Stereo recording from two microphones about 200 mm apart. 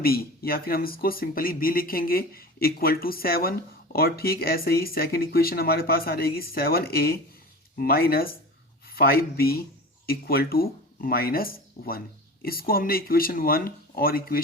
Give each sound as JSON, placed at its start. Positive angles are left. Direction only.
{"t": 0.0, "sound": "speech", "side_deg": 50}